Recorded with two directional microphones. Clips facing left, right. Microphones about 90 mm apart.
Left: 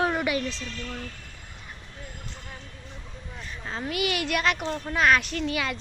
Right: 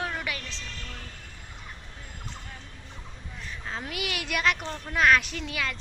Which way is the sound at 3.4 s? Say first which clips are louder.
Left 2 dB; centre (ahead or behind).